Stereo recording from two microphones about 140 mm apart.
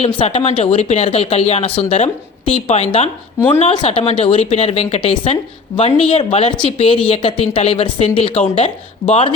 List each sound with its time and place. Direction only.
0.0 s speech: 45° left (ahead or behind)